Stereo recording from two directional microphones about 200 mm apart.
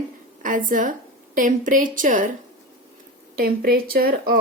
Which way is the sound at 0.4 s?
40° right (ahead or behind).